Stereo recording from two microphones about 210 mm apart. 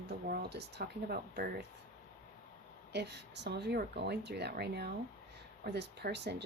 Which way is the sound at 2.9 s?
55° right (ahead or behind).